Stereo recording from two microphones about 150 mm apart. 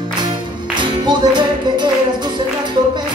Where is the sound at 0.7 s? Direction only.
30° right (ahead or behind).